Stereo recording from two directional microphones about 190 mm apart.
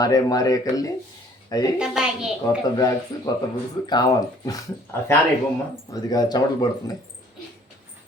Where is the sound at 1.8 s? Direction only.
5° right (ahead or behind).